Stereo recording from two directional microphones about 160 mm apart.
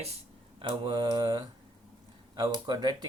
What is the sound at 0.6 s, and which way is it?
Mantra, 30° right (ahead or behind).